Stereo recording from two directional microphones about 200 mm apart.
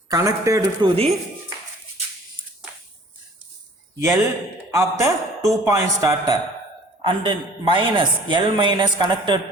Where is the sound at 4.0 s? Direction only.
10° right (ahead or behind).